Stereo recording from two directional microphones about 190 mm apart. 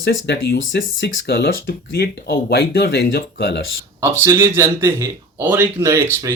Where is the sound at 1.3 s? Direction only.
55° left (ahead or behind).